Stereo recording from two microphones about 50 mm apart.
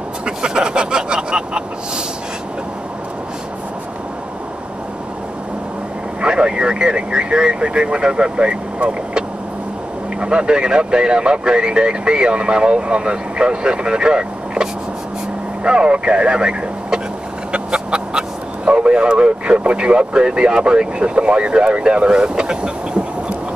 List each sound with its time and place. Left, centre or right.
0.2 s vehicle: centre
6.2 s speech: centre
10.2 s speech: centre
17.5 s chicken: centre
18.7 s speech: right